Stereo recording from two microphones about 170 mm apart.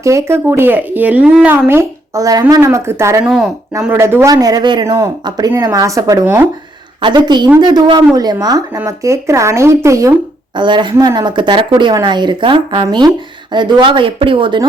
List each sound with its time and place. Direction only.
0.0 s speech: 15° right (ahead or behind)
3.2 s speech: centre (ahead or behind)
3.8 s speech: 15° right (ahead or behind)
7.0 s speech: 25° right (ahead or behind)